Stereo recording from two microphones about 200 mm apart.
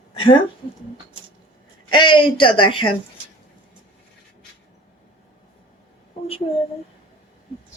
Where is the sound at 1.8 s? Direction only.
20° left (ahead or behind).